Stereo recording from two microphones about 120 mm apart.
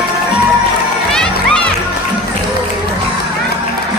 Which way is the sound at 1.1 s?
5° left (ahead or behind).